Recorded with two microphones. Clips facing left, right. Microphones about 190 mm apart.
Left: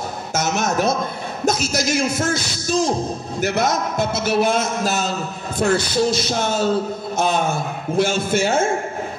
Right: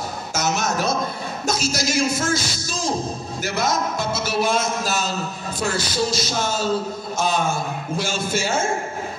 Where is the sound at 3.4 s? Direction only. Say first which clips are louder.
Left 3 dB; 60° left (ahead or behind).